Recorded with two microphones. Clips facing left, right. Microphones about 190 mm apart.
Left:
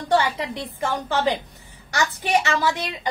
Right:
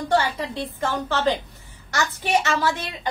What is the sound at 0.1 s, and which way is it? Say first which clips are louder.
A woman's voice: left 2 dB; 15° left (ahead or behind).